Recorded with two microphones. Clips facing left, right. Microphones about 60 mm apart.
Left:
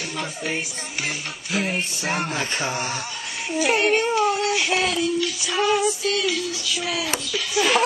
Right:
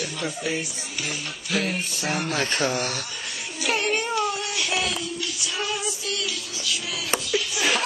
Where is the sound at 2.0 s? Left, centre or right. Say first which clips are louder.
Right 1 dB; left.